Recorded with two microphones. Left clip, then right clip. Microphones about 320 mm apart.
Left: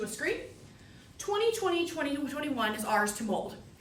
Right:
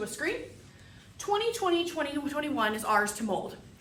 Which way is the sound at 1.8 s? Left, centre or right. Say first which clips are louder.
Right 1 dB; centre.